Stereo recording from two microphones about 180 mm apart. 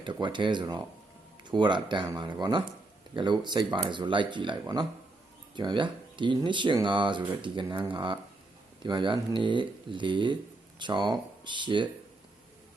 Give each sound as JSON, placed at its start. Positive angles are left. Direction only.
{"t": 0.0, "sound": "speech", "side_deg": -25}